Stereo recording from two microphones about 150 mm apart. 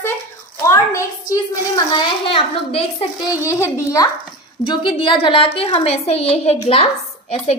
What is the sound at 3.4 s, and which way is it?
A child's voice, 20° left (ahead or behind).